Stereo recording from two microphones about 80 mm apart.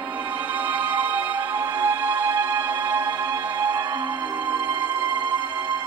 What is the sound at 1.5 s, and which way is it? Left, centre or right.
Music, right.